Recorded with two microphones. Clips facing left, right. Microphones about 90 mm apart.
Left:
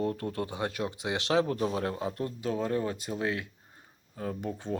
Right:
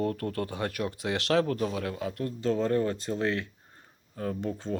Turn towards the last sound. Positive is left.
turn(degrees=15)  # may be behind; listen again after turning